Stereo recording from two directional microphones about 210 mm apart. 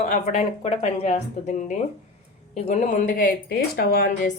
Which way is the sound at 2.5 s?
30° left (ahead or behind).